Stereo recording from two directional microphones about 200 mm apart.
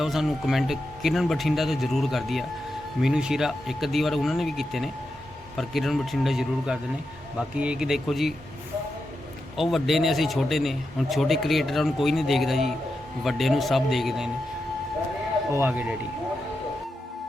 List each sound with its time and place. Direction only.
0.0 s a man's voice: centre (ahead or behind)
9.6 s a man's voice: centre (ahead or behind)
15.5 s speech: 10° right (ahead or behind)